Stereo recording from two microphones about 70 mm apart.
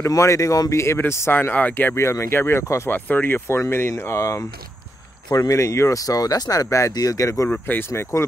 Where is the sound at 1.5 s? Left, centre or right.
Left.